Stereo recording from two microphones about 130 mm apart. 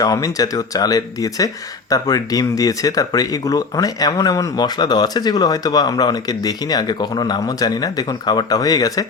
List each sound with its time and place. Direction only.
0.0 s speech: 25° left (ahead or behind)